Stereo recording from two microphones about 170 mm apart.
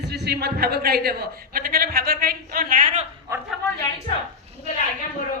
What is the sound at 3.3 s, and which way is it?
Speech, 15° right (ahead or behind).